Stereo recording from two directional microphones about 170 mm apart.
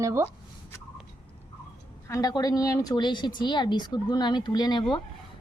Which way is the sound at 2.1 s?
20° left (ahead or behind).